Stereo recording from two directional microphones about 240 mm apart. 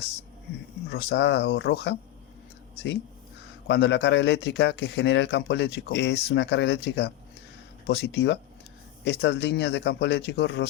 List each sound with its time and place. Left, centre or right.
0.9 s speech: left
3.7 s speech: left